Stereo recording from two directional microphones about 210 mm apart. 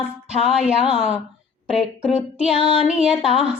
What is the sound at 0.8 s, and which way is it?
Speech, 30° right (ahead or behind).